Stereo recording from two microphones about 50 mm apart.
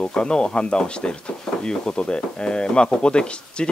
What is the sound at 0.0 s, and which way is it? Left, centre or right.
Speech, centre.